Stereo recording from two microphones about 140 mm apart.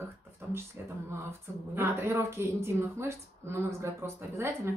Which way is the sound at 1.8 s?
20° right (ahead or behind).